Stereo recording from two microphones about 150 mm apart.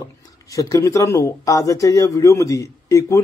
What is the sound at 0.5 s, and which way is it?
A man's voice, 20° left (ahead or behind).